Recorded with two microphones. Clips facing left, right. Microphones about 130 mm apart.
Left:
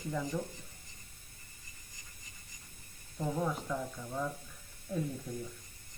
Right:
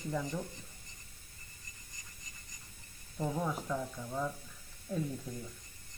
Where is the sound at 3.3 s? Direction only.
5° right (ahead or behind).